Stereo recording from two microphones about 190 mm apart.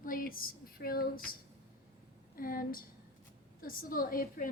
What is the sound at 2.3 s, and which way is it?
A woman's voice, 50° left (ahead or behind).